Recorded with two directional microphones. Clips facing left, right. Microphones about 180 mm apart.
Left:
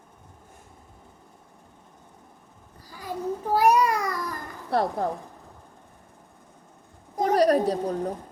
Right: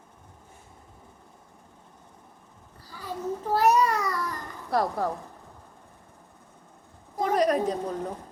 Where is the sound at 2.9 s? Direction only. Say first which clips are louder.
Left 2 dB; 15° left (ahead or behind).